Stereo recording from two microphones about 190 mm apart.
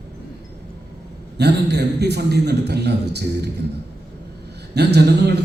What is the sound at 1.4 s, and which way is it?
A man's voice, 60° right (ahead or behind).